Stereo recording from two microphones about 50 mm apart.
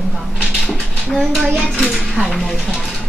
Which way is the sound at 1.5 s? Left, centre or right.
Centre.